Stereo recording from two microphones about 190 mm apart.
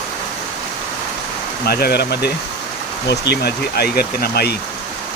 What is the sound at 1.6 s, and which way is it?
Speech, 55° left (ahead or behind).